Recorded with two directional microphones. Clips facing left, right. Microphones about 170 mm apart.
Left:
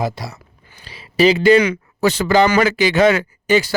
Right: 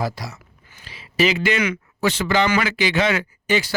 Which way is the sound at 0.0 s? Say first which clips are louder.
Left 3 dB; 25° left (ahead or behind).